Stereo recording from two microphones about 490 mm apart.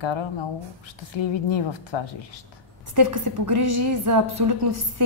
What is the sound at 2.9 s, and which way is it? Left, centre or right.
A woman's voice, right.